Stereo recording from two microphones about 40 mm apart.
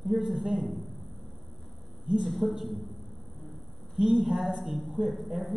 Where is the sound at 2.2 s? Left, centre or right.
Centre.